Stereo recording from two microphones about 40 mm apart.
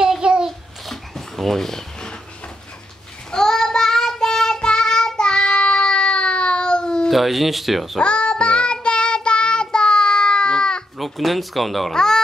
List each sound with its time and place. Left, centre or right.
0.2 s babbling: right
0.8 s a sound: centre
3.3 s child singing: centre
7.1 s speech: centre
8.0 s child singing: left
11.0 s speech: centre
11.9 s speech: centre